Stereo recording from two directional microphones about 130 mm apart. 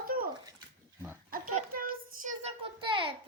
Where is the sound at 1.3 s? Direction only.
90° right.